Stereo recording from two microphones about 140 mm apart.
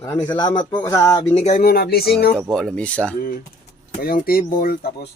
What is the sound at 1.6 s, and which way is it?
Speech, 90° left.